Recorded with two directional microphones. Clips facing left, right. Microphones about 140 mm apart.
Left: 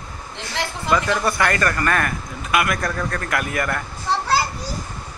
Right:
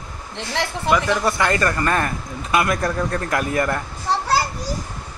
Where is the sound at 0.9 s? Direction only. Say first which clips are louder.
Right 1 dB; 15° right (ahead or behind).